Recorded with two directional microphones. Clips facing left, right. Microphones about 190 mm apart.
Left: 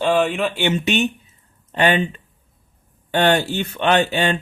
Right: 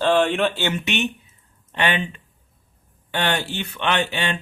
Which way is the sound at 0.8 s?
40° left (ahead or behind).